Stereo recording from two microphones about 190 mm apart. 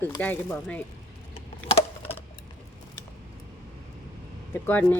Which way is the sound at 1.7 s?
30° left (ahead or behind).